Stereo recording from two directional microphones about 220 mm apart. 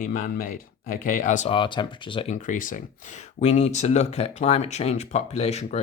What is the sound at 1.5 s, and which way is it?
Speech, 20° left (ahead or behind).